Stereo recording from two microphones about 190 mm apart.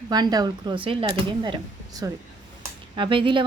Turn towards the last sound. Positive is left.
turn(degrees=-25)  # may be behind; listen again after turning